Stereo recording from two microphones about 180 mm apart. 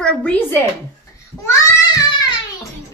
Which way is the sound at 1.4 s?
20° left (ahead or behind).